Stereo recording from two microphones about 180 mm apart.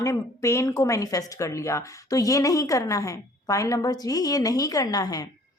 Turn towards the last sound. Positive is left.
turn(degrees=20)  # may be behind; listen again after turning